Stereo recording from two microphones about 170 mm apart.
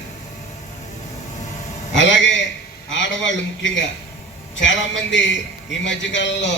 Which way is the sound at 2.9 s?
90° left.